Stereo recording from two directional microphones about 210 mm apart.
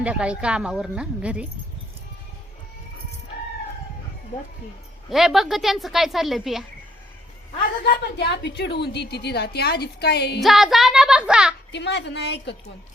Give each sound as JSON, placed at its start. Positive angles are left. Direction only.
{"t": 0.0, "sound": "a woman's voice", "side_deg": -5}
{"t": 5.0, "sound": "a woman's voice", "side_deg": 0}
{"t": 8.1, "sound": "a woman's voice", "side_deg": 55}
{"t": 10.4, "sound": "speech", "side_deg": 0}
{"t": 11.7, "sound": "a woman's voice", "side_deg": 55}